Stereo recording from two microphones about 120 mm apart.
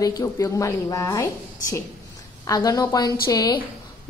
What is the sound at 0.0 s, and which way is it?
A woman's voice, 25° left (ahead or behind).